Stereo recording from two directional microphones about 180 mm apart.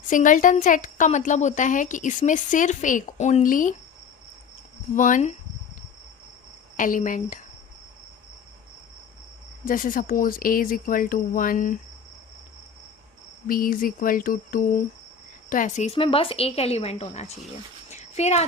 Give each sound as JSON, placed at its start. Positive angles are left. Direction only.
{"t": 0.1, "sound": "a woman's voice", "side_deg": 45}
{"t": 4.9, "sound": "a woman's voice", "side_deg": 45}
{"t": 6.7, "sound": "a woman's voice", "side_deg": 45}
{"t": 9.6, "sound": "a woman's voice", "side_deg": 50}
{"t": 13.5, "sound": "a woman's voice", "side_deg": 50}
{"t": 17.8, "sound": "a sound", "side_deg": 40}